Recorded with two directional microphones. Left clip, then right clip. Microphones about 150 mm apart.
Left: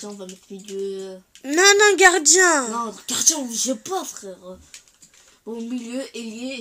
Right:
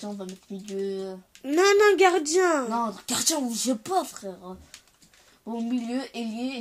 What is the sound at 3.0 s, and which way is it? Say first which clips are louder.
A child's voice: left 5 dB; 90° right.